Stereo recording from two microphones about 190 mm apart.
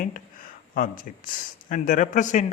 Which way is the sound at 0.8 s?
45° left (ahead or behind).